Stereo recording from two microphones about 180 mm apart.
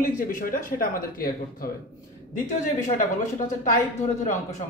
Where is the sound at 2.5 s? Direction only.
40° left (ahead or behind).